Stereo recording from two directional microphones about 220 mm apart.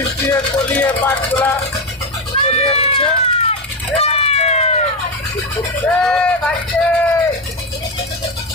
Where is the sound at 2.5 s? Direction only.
30° left (ahead or behind).